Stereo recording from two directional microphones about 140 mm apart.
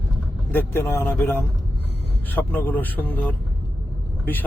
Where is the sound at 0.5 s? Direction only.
15° left (ahead or behind).